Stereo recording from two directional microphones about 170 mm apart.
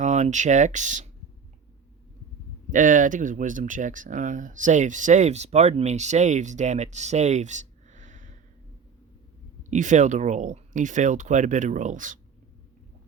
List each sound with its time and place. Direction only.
0.0 s speech: 45° right (ahead or behind)
2.6 s speech: 50° right (ahead or behind)
9.6 s speech: 45° right (ahead or behind)